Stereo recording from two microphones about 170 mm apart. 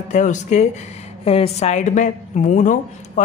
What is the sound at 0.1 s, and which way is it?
Speech, 45° left (ahead or behind).